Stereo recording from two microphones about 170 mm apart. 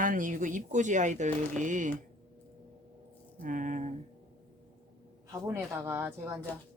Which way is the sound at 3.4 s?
50° right (ahead or behind).